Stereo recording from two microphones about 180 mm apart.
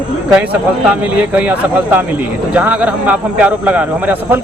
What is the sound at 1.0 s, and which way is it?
A man's voice, 10° right (ahead or behind).